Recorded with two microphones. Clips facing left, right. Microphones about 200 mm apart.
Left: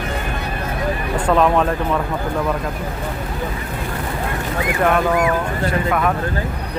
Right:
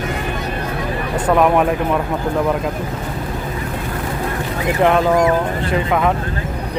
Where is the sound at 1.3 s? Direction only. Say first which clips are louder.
Right 2 dB; 15° right (ahead or behind).